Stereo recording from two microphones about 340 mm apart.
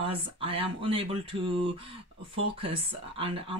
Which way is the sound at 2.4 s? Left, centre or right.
Centre.